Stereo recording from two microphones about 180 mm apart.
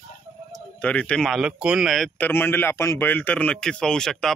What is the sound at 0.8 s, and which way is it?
A man's voice, 5° left (ahead or behind).